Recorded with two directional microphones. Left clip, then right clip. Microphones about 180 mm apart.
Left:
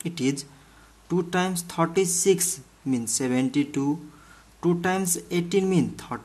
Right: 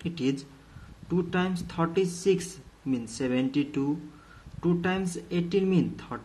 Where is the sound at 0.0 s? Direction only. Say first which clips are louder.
Left 3 dB; 30° left (ahead or behind).